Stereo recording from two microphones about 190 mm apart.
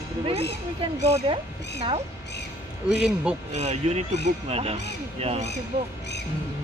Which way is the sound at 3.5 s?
35° right (ahead or behind).